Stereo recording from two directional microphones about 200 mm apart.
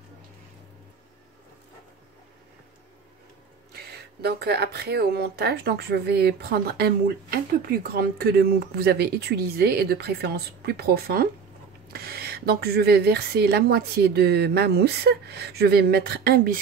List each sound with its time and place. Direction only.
3.7 s speech: 55° right (ahead or behind)